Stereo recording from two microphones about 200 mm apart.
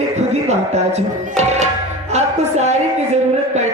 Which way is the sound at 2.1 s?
35° right (ahead or behind).